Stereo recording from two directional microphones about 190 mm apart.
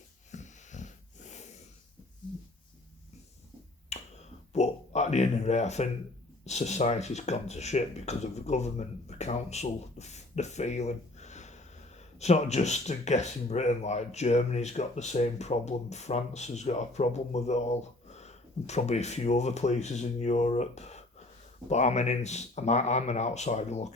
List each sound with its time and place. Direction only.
0.3 s wheeze: 40° left (ahead or behind)
3.9 s finger snapping: 35° left (ahead or behind)
4.5 s a sound: 35° left (ahead or behind)
6.4 s speech: 35° left (ahead or behind)